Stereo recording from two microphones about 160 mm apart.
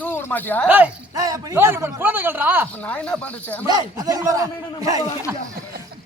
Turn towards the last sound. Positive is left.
turn(degrees=-20)  # may be behind; listen again after turning